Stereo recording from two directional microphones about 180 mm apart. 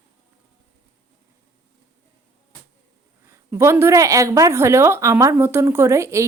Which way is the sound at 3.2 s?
15° right (ahead or behind).